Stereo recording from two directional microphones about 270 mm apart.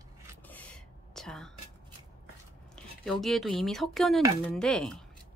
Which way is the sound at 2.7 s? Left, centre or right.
Centre.